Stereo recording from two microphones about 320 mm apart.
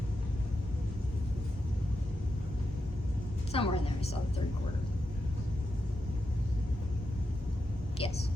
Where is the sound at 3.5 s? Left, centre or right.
Centre.